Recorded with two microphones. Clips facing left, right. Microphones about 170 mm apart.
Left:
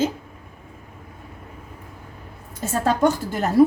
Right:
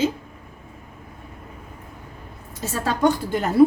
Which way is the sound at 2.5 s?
45° left (ahead or behind).